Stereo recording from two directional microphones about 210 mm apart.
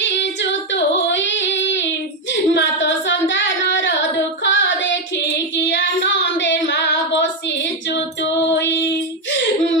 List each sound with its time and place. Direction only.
0.0 s singing: 55° left (ahead or behind)
4.5 s child singing: 60° left (ahead or behind)
7.9 s female singing: 55° left (ahead or behind)
9.3 s a sound: 60° left (ahead or behind)